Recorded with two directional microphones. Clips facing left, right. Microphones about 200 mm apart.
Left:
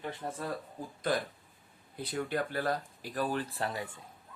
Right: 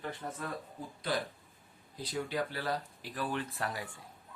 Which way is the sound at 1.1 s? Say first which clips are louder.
Left 3 dB; 50° left (ahead or behind).